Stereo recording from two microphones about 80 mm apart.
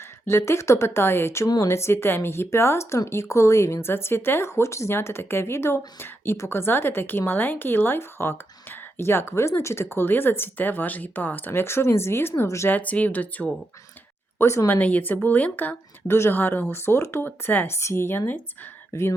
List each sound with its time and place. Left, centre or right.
0.3 s speech: left
12.7 s speech: centre
14.3 s speech: left
14.7 s speech: centre